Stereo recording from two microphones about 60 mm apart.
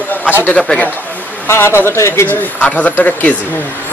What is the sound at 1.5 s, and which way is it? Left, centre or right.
Speech, left.